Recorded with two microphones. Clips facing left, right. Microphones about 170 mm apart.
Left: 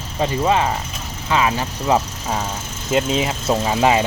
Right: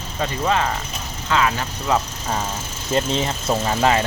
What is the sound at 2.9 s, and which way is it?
Speech, 5° left (ahead or behind).